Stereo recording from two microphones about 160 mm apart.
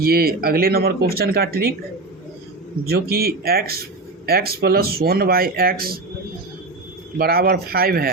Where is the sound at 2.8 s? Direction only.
75° right (ahead or behind).